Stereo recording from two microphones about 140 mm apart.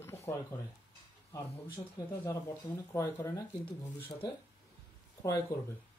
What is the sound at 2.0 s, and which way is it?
Speech, 25° left (ahead or behind).